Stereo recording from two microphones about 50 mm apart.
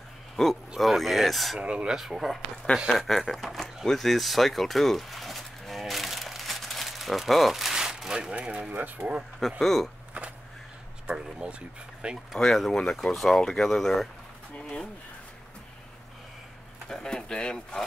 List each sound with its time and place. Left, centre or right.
0.4 s speech: centre
1.6 s speech: right
1.9 s speech: centre
2.9 s a sound: centre
8.4 s speech: right
8.7 s speech: right
9.6 s speech: centre
11.1 s speech: centre
12.0 s speech: right
12.4 s speech: centre
16.9 s speech: centre